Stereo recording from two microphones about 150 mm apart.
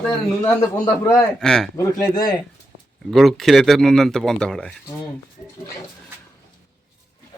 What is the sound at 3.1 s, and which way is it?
Speech, centre (ahead or behind).